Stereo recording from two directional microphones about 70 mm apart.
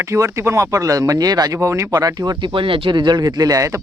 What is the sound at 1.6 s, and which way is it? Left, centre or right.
Speech, right.